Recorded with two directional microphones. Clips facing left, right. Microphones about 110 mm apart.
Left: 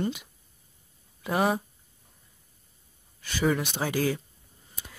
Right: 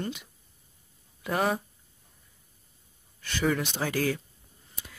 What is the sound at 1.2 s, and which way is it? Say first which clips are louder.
Speech: left 2 dB; 10° left (ahead or behind).